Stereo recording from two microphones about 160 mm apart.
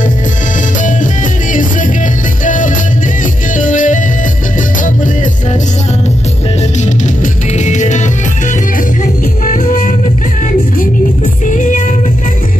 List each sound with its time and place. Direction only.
1.5 s music: 55° left (ahead or behind)
7.5 s music: 50° left (ahead or behind)
9.5 s music: 60° left (ahead or behind)
11.4 s music: 55° left (ahead or behind)